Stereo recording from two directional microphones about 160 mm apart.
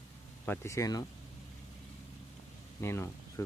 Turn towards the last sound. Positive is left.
turn(degrees=15)  # may be behind; listen again after turning